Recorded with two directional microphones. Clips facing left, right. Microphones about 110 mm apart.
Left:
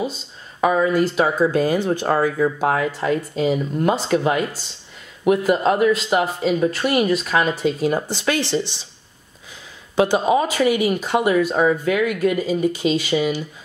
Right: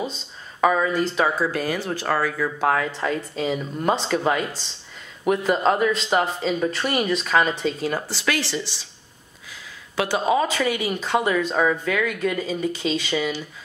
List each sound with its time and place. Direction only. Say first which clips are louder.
0.0 s speech: left 4 dB; 5° left (ahead or behind)
7.8 s speech: left 5 dB; 20° left (ahead or behind)
9.9 s speech: left 4 dB; 20° left (ahead or behind)